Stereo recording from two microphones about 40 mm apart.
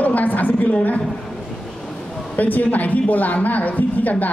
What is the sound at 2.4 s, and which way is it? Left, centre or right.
Speech, left.